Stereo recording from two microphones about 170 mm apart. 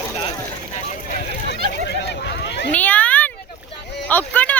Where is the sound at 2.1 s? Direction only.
85° left.